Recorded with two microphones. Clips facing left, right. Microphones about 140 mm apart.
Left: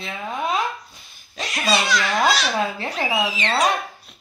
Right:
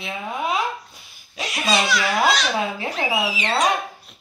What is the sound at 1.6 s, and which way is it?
Speech, 5° right (ahead or behind).